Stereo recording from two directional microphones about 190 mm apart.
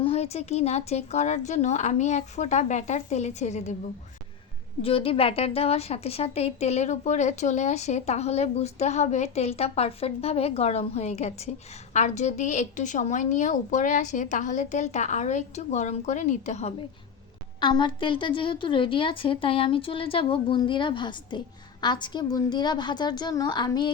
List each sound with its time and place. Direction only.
0.0 s a woman's voice: 35° left (ahead or behind)
4.8 s a woman's voice: 30° left (ahead or behind)
17.6 s a woman's voice: 25° left (ahead or behind)